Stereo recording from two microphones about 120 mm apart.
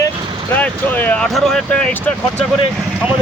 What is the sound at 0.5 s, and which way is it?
Speech, 15° left (ahead or behind).